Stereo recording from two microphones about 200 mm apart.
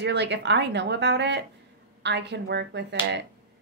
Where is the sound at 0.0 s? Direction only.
60° right (ahead or behind).